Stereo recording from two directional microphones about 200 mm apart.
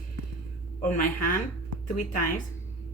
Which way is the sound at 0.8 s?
45° left (ahead or behind).